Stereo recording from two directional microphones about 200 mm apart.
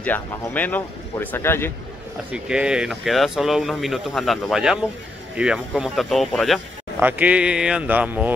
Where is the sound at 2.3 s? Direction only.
5° right (ahead or behind).